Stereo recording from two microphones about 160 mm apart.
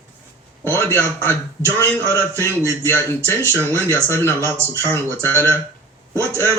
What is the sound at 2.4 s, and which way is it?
Speech, 15° left (ahead or behind).